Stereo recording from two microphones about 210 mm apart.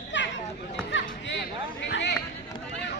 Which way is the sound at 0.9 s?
60° left (ahead or behind).